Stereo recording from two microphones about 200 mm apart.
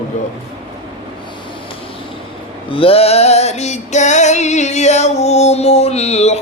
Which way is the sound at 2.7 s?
30° left (ahead or behind).